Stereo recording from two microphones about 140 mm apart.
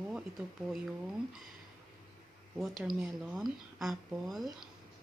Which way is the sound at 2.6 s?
Centre (ahead or behind).